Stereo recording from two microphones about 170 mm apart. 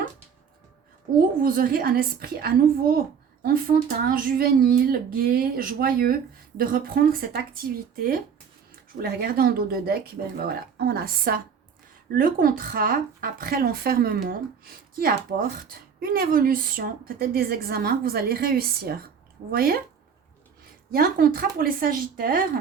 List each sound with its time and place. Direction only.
1.4 s a woman's voice: 60° right (ahead or behind)
20.9 s a woman's voice: 60° right (ahead or behind)